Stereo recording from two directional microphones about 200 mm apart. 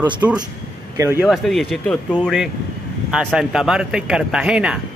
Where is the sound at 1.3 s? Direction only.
Centre (ahead or behind).